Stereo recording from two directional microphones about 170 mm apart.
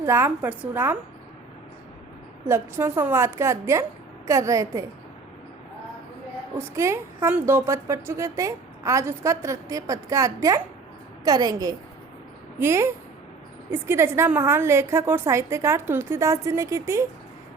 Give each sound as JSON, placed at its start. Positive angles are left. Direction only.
{"t": 0.0, "sound": "a woman's voice", "side_deg": -15}
{"t": 2.5, "sound": "a woman's voice", "side_deg": -15}
{"t": 6.6, "sound": "a woman's voice", "side_deg": -15}